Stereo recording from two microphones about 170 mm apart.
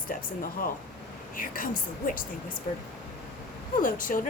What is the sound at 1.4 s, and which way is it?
Speech, 55° left (ahead or behind).